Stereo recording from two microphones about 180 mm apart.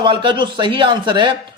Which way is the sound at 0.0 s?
25° right (ahead or behind).